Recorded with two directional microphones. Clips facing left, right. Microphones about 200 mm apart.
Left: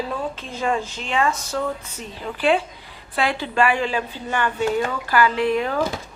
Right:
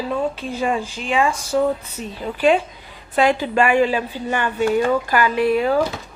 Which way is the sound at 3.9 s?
15° right (ahead or behind).